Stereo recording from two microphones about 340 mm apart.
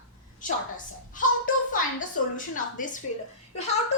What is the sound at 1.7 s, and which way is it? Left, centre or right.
A woman's voice, left.